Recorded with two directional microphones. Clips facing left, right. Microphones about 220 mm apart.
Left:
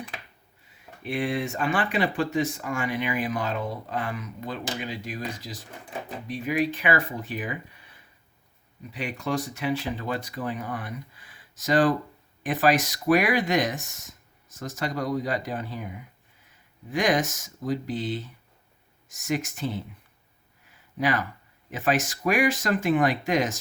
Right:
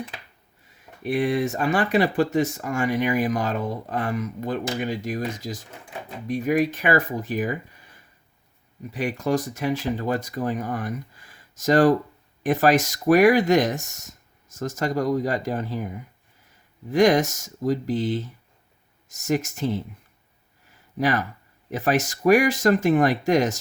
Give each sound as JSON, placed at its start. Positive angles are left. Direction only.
{"t": 1.0, "sound": "speech", "side_deg": -40}
{"t": 21.0, "sound": "speech", "side_deg": -45}